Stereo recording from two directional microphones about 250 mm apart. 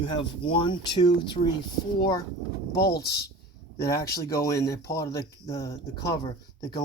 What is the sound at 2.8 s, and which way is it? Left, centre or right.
Speech, left.